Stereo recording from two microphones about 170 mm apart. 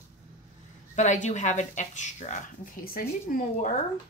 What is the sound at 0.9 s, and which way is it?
Speech, 45° left (ahead or behind).